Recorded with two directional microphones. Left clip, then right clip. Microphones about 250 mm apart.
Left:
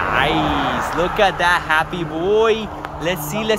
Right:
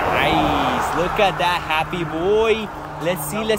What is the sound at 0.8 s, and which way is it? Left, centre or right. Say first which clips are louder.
Speech: left 1 dB; right.